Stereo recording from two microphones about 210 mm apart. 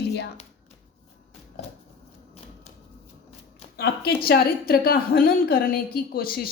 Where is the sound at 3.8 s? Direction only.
45° left (ahead or behind).